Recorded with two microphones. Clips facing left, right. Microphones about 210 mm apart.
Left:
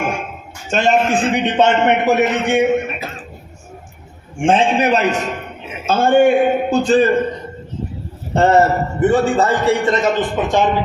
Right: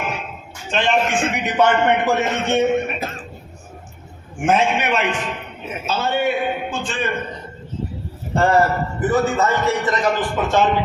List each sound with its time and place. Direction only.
0.0 s a man's voice: 50° left (ahead or behind); by 2.6 s 15° left (ahead or behind)
4.4 s a man's voice: 30° left (ahead or behind)
8.4 s a man's voice: 25° left (ahead or behind)